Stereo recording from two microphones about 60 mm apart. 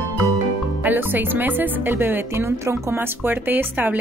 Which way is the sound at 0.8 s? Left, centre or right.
Right.